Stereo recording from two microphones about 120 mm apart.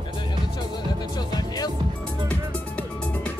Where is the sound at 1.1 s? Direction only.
35° left (ahead or behind).